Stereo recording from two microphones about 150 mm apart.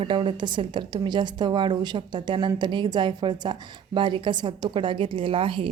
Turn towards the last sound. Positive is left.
turn(degrees=-35)  # may be behind; listen again after turning